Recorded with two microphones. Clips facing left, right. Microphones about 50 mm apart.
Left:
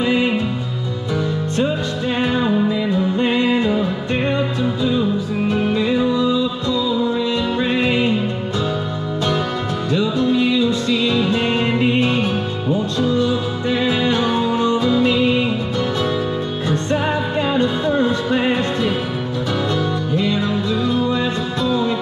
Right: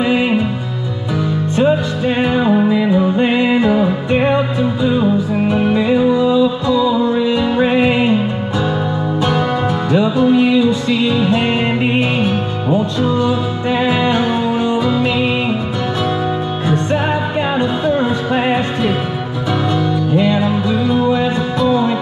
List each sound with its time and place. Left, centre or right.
0.0 s music: centre
1.6 s music: right
9.8 s music: centre
16.6 s music: right
20.2 s music: centre